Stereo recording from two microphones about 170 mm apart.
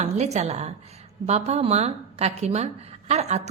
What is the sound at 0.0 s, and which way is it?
A woman's voice, 40° right (ahead or behind).